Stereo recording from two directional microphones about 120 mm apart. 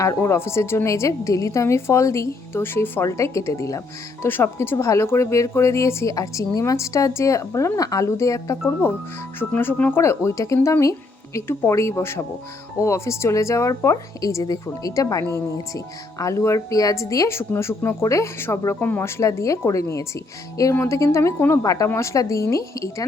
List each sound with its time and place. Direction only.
0.0 s speech: 25° left (ahead or behind)